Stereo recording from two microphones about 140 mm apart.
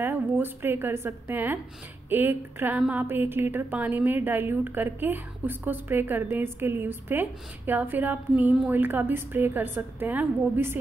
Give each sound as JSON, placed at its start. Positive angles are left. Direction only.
{"t": 0.0, "sound": "a woman's voice", "side_deg": -15}